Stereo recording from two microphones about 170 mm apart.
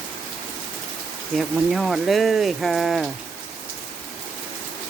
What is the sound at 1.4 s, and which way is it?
Speech, centre (ahead or behind).